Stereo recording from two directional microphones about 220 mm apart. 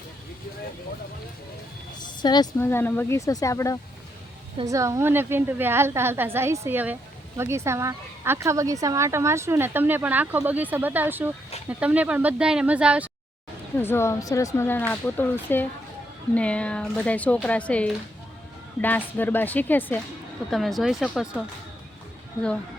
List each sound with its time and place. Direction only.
2.0 s speech: 20° left (ahead or behind)
4.5 s speech: 15° right (ahead or behind)
13.8 s a woman's voice: 10° left (ahead or behind)